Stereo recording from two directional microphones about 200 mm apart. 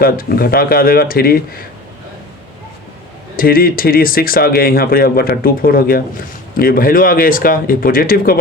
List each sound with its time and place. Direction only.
0.0 s speech: 50° left (ahead or behind)
3.3 s speech: 45° left (ahead or behind)